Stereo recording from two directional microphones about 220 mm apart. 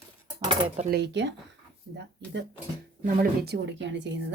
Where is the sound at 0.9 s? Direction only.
50° right (ahead or behind).